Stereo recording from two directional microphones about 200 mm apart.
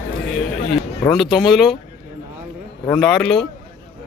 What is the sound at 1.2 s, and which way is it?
Speech, centre (ahead or behind).